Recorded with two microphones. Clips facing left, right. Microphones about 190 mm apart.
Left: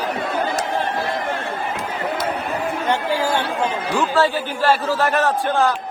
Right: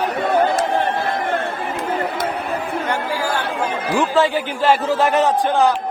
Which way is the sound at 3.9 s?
20° right (ahead or behind).